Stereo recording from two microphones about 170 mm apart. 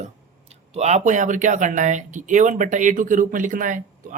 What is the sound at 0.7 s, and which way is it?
Speech, 40° right (ahead or behind).